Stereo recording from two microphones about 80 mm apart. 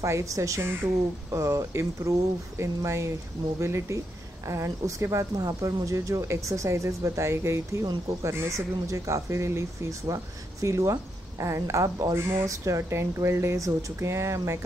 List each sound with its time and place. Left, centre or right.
0.0 s speech: right